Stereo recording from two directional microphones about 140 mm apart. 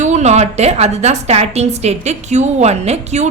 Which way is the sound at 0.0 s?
55° right (ahead or behind).